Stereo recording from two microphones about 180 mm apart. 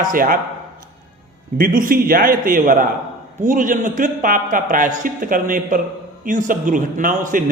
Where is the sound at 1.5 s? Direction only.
55° right (ahead or behind).